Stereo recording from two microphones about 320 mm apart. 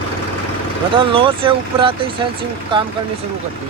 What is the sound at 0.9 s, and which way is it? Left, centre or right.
Speech, centre.